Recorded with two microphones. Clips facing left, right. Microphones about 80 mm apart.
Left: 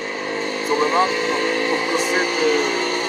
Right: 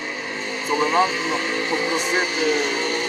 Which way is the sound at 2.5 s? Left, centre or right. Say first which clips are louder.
Left 3 dB; left.